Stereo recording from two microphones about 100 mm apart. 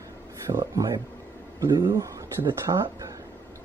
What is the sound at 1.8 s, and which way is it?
Speech, 30° right (ahead or behind).